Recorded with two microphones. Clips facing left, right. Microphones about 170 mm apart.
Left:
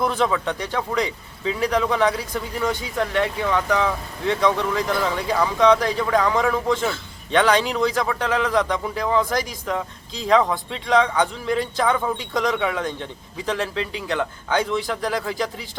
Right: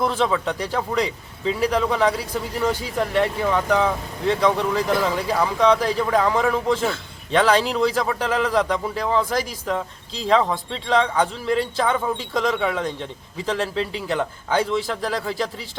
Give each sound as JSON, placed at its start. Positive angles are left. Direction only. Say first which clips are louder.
{"t": 0.0, "sound": "speech", "louder": "even", "side_deg": 0}
{"t": 0.3, "sound": "speech", "louder": "right 1 dB", "side_deg": -10}
{"t": 11.4, "sound": "speech", "louder": "right 1 dB", "side_deg": -30}
{"t": 11.8, "sound": "speech", "louder": "even", "side_deg": 0}